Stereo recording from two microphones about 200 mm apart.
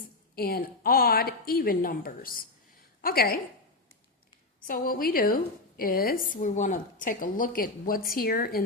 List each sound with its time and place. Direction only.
0.3 s a woman's voice: 50° left (ahead or behind)
4.6 s a woman's voice: 45° left (ahead or behind)